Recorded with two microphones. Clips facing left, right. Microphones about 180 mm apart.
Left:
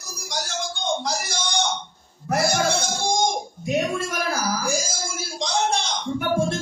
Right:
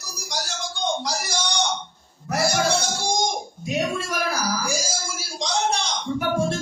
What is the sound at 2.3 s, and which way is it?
Music, 55° left (ahead or behind).